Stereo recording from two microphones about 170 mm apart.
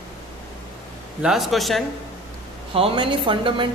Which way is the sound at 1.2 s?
Centre (ahead or behind).